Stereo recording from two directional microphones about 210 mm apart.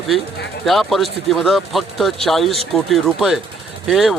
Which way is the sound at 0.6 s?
Centre (ahead or behind).